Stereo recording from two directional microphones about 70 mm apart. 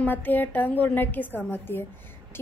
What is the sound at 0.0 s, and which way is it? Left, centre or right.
A woman's voice, left.